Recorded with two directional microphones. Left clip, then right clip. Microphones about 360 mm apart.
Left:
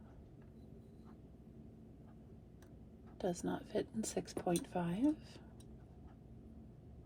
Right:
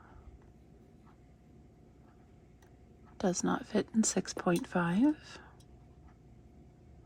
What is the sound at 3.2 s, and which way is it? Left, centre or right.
Speech, right.